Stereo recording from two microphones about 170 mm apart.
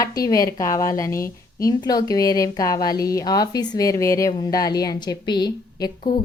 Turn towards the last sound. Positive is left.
turn(degrees=25)  # may be behind; listen again after turning